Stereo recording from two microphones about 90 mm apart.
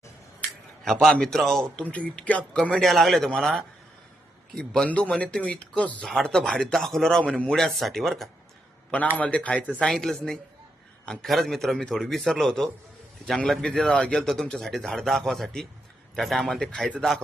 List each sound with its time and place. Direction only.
0.9 s a man's voice: 5° left (ahead or behind)
1.8 s a man's voice: 15° left (ahead or behind)
9.1 s a man's voice: 15° left (ahead or behind)